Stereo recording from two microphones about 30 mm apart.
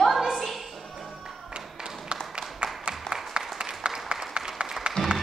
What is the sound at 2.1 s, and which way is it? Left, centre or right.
Applause, right.